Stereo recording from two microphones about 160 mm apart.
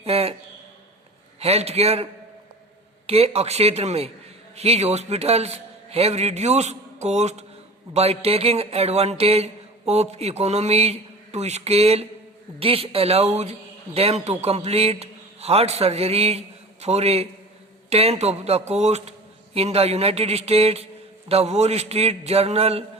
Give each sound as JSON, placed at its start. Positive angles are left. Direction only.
{"t": 0.0, "sound": "a sound", "side_deg": -40}
{"t": 1.4, "sound": "speech", "side_deg": -40}
{"t": 3.1, "sound": "speech", "side_deg": -40}